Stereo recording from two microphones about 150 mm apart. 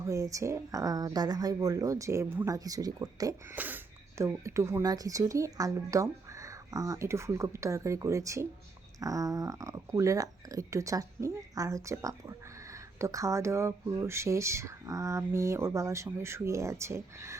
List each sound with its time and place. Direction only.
0.0 s speech: 20° right (ahead or behind)
3.5 s speech: 10° right (ahead or behind)